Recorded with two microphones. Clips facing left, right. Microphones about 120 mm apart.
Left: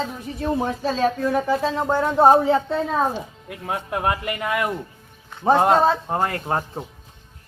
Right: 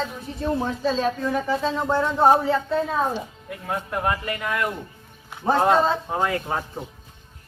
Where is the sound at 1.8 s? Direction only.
15° left (ahead or behind).